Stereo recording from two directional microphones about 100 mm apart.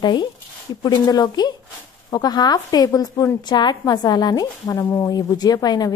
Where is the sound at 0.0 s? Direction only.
50° left (ahead or behind).